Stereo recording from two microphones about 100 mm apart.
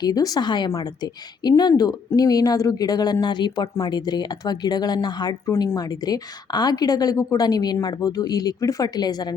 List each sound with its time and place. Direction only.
0.0 s a woman's voice: 40° left (ahead or behind)